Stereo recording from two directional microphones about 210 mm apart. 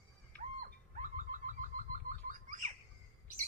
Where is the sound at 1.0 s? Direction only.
40° right (ahead or behind).